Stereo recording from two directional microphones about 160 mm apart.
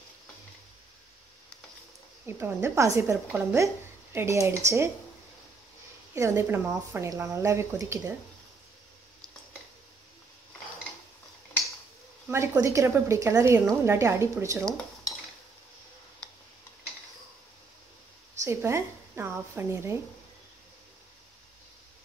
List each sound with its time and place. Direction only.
2.2 s a woman's voice: 15° right (ahead or behind)
6.1 s a woman's voice: 15° right (ahead or behind)
12.3 s a woman's voice: 15° right (ahead or behind)
16.2 s tick-tock: 5° left (ahead or behind)
18.4 s a woman's voice: 15° right (ahead or behind)